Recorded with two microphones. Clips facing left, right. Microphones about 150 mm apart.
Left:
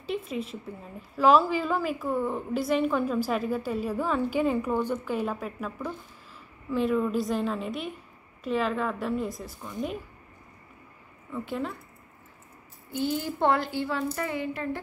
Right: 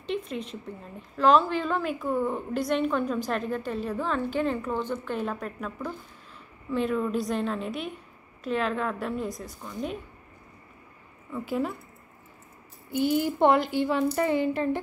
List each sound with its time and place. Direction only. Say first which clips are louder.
0.0 s a woman's voice: even; 5° left (ahead or behind)
11.3 s a woman's voice: right 3 dB; 5° right (ahead or behind)
12.9 s a child's voice: right 4 dB; 15° right (ahead or behind)